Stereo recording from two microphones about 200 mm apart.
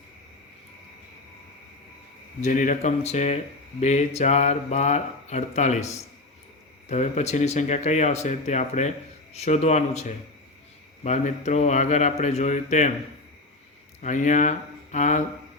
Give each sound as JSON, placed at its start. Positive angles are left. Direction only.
{"t": 2.4, "sound": "speech", "side_deg": 40}
{"t": 14.0, "sound": "speech", "side_deg": 35}